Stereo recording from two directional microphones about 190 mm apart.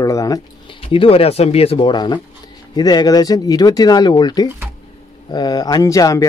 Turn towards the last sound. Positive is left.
turn(degrees=15)  # may be behind; listen again after turning